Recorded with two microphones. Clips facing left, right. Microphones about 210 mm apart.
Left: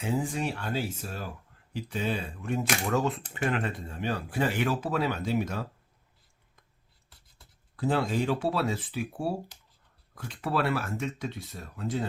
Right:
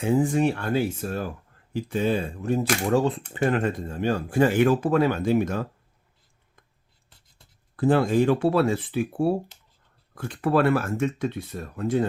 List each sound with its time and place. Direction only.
0.0 s speech: 50° right (ahead or behind)
7.8 s speech: 55° right (ahead or behind)